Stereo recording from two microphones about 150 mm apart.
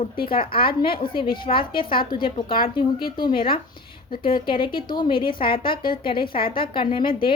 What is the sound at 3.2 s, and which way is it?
A woman's voice, 35° left (ahead or behind).